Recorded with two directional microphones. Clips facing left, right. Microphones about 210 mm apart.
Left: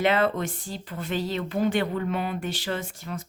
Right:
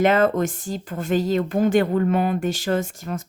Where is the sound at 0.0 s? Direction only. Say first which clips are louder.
Right 5 dB; 45° right (ahead or behind).